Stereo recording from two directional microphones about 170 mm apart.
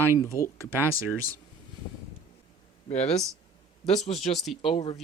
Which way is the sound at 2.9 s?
40° left (ahead or behind).